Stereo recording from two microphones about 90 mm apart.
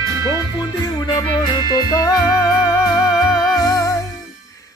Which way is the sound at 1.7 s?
45° left (ahead or behind).